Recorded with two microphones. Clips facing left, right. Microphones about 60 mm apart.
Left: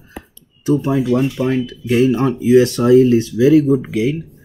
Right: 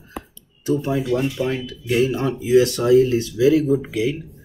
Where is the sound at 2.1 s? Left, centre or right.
Left.